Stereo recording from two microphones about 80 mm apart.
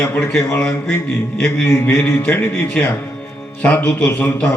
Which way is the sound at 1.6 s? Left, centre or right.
Left.